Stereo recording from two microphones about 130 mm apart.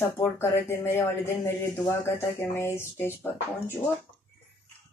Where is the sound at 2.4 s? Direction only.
20° left (ahead or behind).